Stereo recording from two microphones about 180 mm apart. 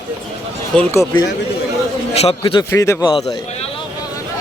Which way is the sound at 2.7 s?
15° left (ahead or behind).